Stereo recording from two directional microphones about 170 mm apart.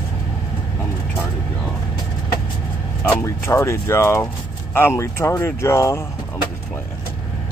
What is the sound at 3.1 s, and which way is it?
Speech, 15° left (ahead or behind).